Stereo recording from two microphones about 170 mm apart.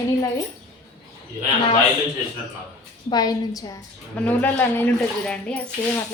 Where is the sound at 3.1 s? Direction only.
25° left (ahead or behind).